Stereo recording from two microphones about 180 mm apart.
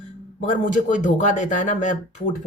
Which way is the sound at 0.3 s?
45° left (ahead or behind).